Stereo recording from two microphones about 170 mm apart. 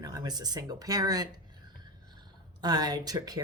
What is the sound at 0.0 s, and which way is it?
Speech, 25° right (ahead or behind).